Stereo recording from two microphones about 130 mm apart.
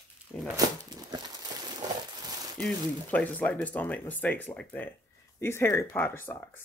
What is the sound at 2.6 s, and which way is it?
Speech, 10° left (ahead or behind).